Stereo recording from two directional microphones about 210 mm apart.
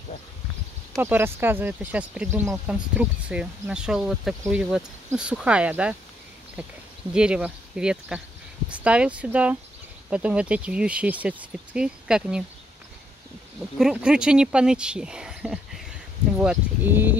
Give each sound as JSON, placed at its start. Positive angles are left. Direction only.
{"t": 0.9, "sound": "speech", "side_deg": -10}
{"t": 7.2, "sound": "speech", "side_deg": -5}
{"t": 13.7, "sound": "speech", "side_deg": -5}